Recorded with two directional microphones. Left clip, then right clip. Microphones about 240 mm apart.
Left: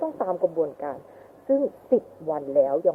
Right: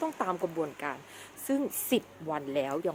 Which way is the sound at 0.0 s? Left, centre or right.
Right.